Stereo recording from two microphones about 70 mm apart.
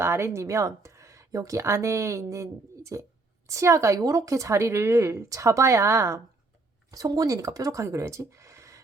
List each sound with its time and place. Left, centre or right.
0.0 s speech: right
6.9 s speech: right